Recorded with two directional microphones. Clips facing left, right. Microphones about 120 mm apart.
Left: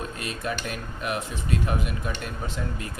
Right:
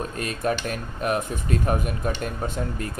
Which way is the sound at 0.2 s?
45° right (ahead or behind).